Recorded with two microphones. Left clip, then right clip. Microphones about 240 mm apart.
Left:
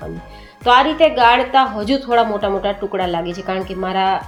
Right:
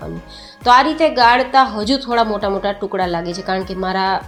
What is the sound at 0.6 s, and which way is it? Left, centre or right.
Speech, right.